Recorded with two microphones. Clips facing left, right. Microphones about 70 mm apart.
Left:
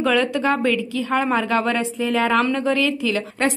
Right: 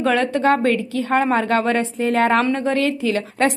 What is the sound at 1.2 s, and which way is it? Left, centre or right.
Speech, right.